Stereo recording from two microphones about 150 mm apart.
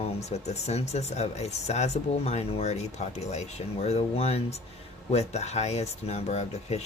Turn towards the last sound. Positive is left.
turn(degrees=45)  # may be behind; listen again after turning